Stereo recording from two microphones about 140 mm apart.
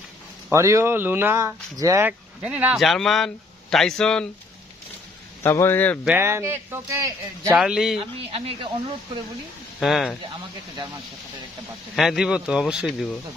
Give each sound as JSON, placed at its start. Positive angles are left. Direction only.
{"t": 0.5, "sound": "speech", "side_deg": -20}
{"t": 2.4, "sound": "speech", "side_deg": -10}
{"t": 5.4, "sound": "speech", "side_deg": 15}
{"t": 6.1, "sound": "speech", "side_deg": -20}
{"t": 7.5, "sound": "speech", "side_deg": -5}
{"t": 8.0, "sound": "speech", "side_deg": -45}
{"t": 9.8, "sound": "speech", "side_deg": 0}
{"t": 11.9, "sound": "speech", "side_deg": 0}